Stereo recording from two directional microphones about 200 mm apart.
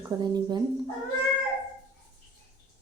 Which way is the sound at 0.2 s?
20° right (ahead or behind).